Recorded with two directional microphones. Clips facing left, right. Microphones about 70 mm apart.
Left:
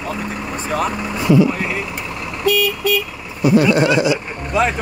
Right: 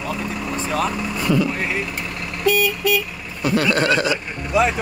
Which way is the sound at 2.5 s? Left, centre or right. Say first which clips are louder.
Left 2 dB; right.